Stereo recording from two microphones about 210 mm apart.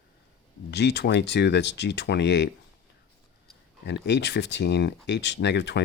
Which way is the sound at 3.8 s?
55° left (ahead or behind).